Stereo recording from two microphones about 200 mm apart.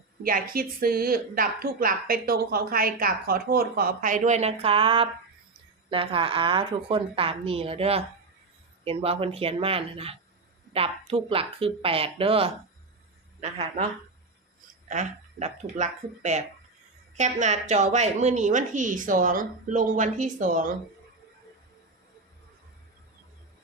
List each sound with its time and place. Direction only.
0.2 s a woman's voice: 45° right (ahead or behind)
14.8 s speech: 35° right (ahead or behind)